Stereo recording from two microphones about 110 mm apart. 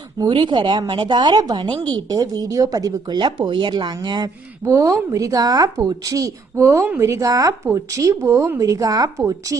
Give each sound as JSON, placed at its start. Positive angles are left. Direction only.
{"t": 0.2, "sound": "speech", "side_deg": -45}
{"t": 4.6, "sound": "a woman's voice", "side_deg": -30}